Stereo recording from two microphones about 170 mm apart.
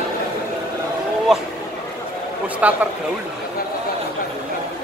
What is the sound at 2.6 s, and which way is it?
Speech, 10° right (ahead or behind).